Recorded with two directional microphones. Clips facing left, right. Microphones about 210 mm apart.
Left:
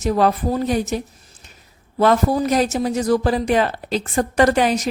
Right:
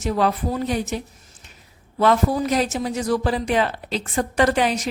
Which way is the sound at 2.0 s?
40° left (ahead or behind).